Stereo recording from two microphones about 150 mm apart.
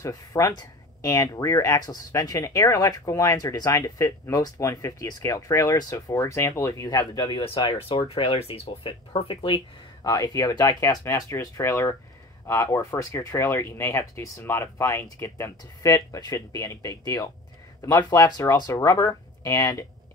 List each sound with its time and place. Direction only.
0.0 s speech: 20° left (ahead or behind)
10.0 s speech: 25° left (ahead or behind)